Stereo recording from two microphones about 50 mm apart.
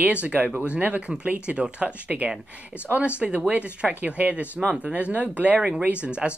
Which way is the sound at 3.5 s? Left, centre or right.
Right.